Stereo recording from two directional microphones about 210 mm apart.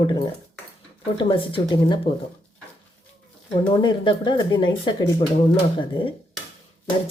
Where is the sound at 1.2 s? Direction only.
25° left (ahead or behind).